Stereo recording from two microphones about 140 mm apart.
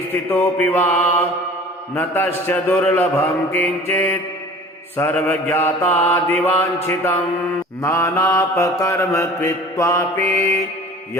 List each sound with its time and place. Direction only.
0.1 s mantra: 15° left (ahead or behind)